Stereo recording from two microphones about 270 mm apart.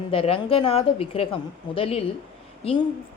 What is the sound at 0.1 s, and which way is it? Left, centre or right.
A woman's voice, centre.